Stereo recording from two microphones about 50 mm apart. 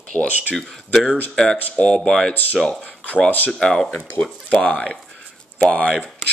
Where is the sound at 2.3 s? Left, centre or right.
Left.